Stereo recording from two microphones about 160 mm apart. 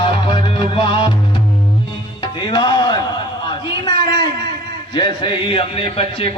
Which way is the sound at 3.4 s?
30° left (ahead or behind).